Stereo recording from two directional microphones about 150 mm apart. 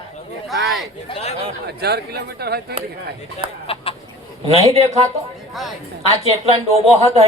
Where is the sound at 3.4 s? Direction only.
35° right (ahead or behind).